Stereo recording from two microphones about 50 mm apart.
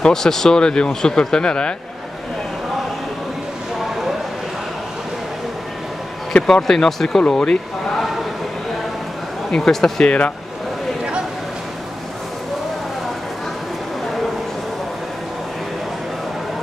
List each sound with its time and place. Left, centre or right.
0.0 s speech: centre
6.4 s speech: centre
9.5 s speech: centre
10.0 s speech: left